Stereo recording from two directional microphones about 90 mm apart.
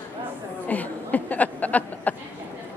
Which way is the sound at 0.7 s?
20° left (ahead or behind).